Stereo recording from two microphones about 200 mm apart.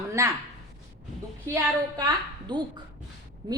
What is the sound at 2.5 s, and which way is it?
Speech, 20° right (ahead or behind).